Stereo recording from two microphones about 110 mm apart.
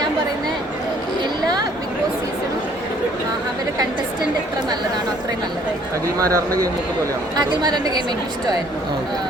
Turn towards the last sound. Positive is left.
turn(degrees=-40)  # may be behind; listen again after turning